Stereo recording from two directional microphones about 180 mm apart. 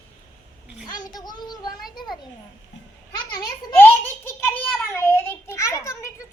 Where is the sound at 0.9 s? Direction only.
20° left (ahead or behind).